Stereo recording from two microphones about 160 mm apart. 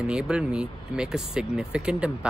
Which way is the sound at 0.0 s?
5° right (ahead or behind).